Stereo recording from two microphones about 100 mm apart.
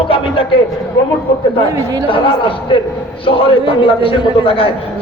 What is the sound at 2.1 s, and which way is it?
A man's voice, 60° left (ahead or behind).